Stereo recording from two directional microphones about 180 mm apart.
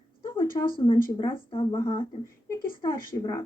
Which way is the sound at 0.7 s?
30° left (ahead or behind).